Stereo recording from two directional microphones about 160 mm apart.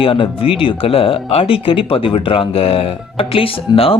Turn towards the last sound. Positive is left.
turn(degrees=35)  # may be behind; listen again after turning